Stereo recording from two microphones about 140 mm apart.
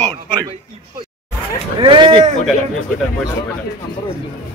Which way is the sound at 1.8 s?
35° right (ahead or behind).